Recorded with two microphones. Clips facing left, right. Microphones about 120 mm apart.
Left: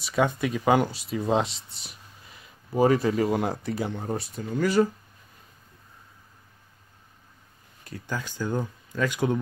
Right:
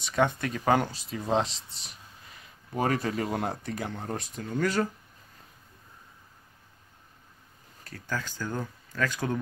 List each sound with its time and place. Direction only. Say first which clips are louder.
0.0 s speech: left 2 dB; 5° left (ahead or behind)
7.8 s speech: left 1 dB; 15° left (ahead or behind)